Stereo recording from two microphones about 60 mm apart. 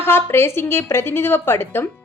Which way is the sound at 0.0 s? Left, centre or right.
Left.